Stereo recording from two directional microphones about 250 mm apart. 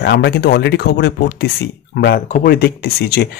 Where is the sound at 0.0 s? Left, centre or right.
Left.